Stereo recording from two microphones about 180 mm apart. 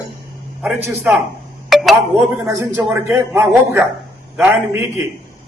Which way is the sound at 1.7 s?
Centre (ahead or behind).